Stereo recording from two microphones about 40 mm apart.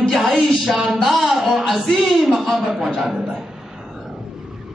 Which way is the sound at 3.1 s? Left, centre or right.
Centre.